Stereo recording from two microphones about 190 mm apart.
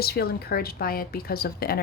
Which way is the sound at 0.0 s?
55° left (ahead or behind).